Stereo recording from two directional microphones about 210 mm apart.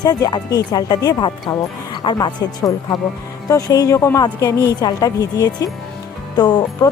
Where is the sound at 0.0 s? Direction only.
20° left (ahead or behind).